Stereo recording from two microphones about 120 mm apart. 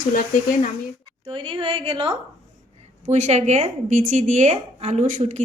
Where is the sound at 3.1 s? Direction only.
75° right (ahead or behind).